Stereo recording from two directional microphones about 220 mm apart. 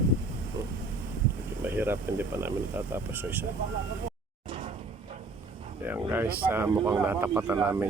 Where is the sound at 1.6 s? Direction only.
10° right (ahead or behind).